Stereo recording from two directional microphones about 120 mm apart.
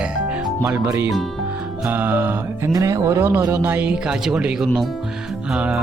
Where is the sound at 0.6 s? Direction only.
25° right (ahead or behind); by 5.8 s 10° right (ahead or behind).